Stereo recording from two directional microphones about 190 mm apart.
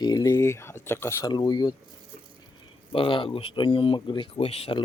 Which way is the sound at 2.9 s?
25° left (ahead or behind).